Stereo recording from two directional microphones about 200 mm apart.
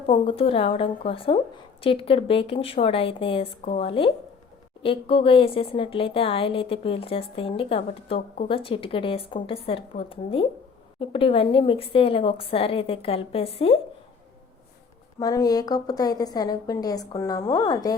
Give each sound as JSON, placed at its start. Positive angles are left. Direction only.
{"t": 0.1, "sound": "a woman's voice", "side_deg": 25}
{"t": 15.2, "sound": "a woman's voice", "side_deg": 20}